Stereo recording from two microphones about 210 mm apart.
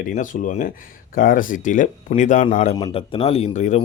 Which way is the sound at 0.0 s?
40° left (ahead or behind).